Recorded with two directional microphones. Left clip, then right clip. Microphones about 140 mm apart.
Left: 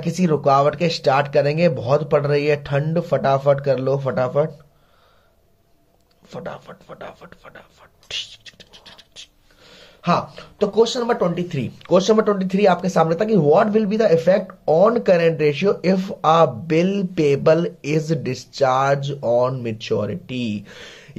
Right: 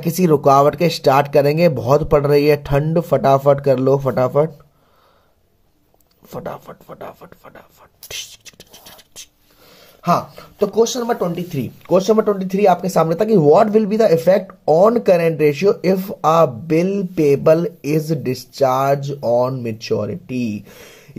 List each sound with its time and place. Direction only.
0.0 s speech: 90° right; by 4.5 s 75° right (ahead or behind)
6.2 s speech: 75° right (ahead or behind)
6.7 s speech: 50° right (ahead or behind)
8.1 s whispering: 90° right; by 10.8 s 60° right (ahead or behind)
10.9 s speech: 30° right (ahead or behind); by 14.9 s 65° right (ahead or behind)
14.9 s speech: 50° right (ahead or behind)